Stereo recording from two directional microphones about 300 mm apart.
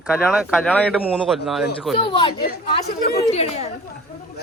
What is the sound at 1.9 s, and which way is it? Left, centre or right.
Speech, centre.